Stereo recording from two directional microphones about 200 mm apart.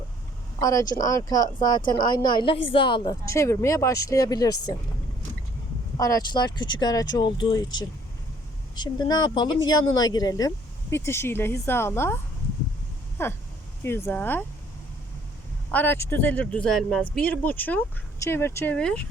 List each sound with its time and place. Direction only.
0.6 s speech: 15° left (ahead or behind)
6.0 s speech: 15° left (ahead or behind)
15.7 s speech: 10° left (ahead or behind)